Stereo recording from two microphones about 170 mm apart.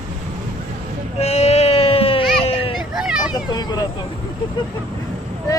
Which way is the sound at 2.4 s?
35° left (ahead or behind).